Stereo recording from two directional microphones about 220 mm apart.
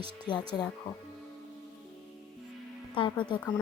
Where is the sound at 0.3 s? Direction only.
20° left (ahead or behind).